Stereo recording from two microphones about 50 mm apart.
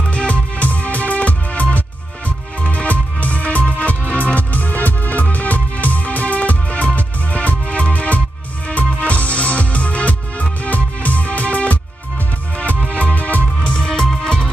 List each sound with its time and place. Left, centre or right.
0.1 s music: left
13.7 s music: centre